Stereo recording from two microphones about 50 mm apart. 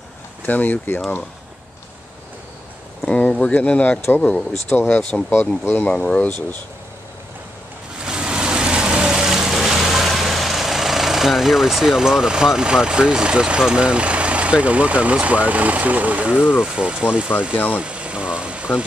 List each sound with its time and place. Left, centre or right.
0.5 s speech: left
3.1 s a sound: left
3.5 s speech: left
4.4 s speech: centre
4.8 s speech: left
8.0 s vehicle: centre
17.6 s engine: right